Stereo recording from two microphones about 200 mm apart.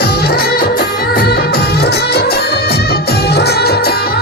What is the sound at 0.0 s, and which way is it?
Music of bollywood, 55° left (ahead or behind).